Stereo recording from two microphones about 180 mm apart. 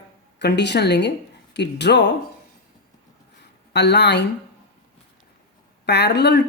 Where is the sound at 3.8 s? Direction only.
70° left (ahead or behind).